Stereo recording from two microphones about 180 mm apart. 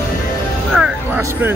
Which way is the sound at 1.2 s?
10° right (ahead or behind).